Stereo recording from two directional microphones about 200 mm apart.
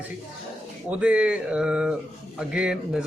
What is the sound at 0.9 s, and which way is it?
Speech, 5° right (ahead or behind).